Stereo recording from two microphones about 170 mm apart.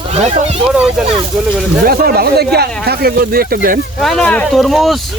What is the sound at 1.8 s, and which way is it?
Speech, 60° right (ahead or behind).